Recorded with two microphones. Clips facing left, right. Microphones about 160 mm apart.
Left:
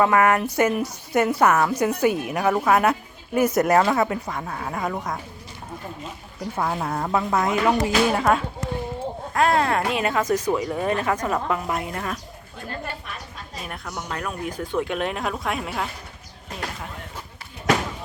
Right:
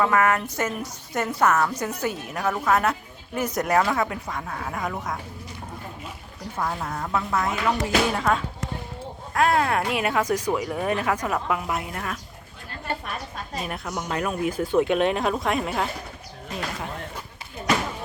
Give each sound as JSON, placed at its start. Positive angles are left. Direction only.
{"t": 0.0, "sound": "a woman's voice", "side_deg": 10}
{"t": 6.6, "sound": "speech", "side_deg": 15}
{"t": 7.4, "sound": "a woman's voice", "side_deg": 15}
{"t": 9.3, "sound": "speech", "side_deg": -5}
{"t": 13.7, "sound": "speech", "side_deg": -5}